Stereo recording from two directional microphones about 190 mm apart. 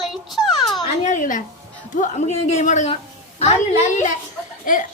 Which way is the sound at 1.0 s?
40° left (ahead or behind).